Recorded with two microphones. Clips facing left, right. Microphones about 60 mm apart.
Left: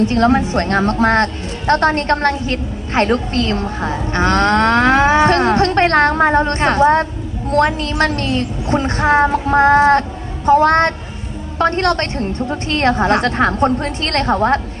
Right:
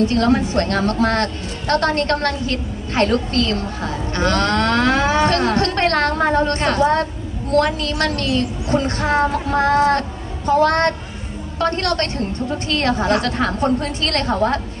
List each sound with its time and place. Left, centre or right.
0.0 s a woman's voice: left